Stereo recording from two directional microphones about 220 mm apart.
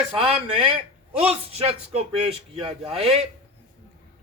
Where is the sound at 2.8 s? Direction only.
Centre (ahead or behind).